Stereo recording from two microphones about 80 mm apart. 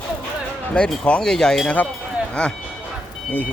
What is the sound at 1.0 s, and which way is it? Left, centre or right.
Speech, centre.